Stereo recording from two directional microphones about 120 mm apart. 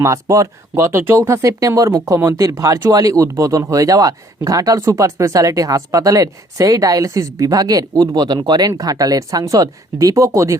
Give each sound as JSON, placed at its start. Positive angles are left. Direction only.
{"t": 0.0, "sound": "speech", "side_deg": -25}